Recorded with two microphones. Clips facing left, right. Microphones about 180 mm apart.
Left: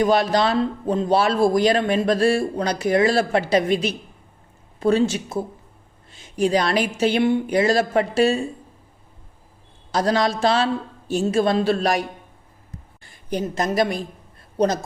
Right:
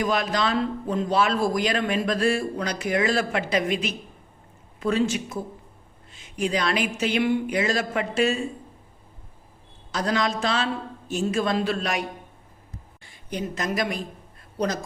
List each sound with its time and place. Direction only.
0.0 s a man's voice: 30° left (ahead or behind)
9.9 s a man's voice: 35° left (ahead or behind)
13.1 s a woman's voice: 35° left (ahead or behind)